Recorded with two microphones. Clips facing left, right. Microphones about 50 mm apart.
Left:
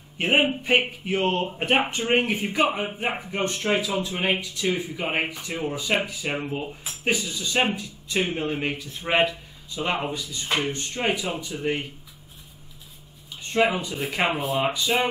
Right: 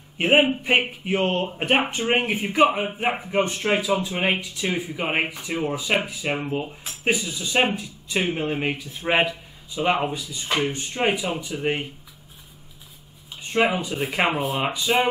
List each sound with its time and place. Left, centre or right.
0.2 s speech: centre
13.4 s a sound: centre
14.1 s speech: centre